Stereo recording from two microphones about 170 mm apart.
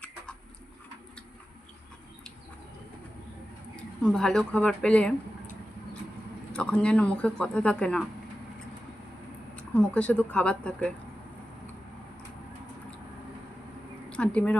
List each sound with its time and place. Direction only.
4.0 s speech: 5° left (ahead or behind)
6.5 s speech: 5° left (ahead or behind)
9.6 s speech: 5° left (ahead or behind)
14.1 s speech: 5° left (ahead or behind)